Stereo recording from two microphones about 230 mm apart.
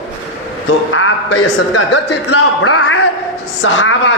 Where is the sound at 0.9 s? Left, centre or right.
Left.